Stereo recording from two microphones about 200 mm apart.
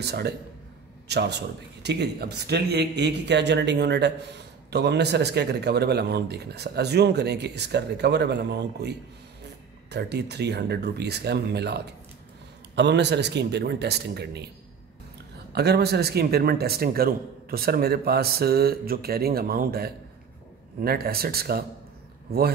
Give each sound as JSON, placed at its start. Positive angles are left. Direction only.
{"t": 0.0, "sound": "a man's voice", "side_deg": -55}
{"t": 15.5, "sound": "a man's voice", "side_deg": -55}